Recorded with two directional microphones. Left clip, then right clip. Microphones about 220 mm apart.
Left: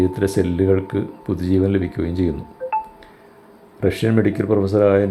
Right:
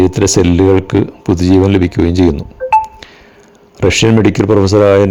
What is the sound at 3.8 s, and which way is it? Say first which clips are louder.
Speech: right 9 dB; 40° right (ahead or behind).